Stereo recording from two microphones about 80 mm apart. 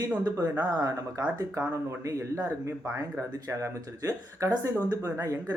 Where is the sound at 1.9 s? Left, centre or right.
Right.